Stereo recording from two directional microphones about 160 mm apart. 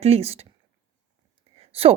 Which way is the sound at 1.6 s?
35° right (ahead or behind).